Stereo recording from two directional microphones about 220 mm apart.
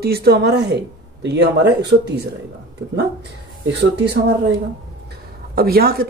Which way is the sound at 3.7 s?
50° right (ahead or behind).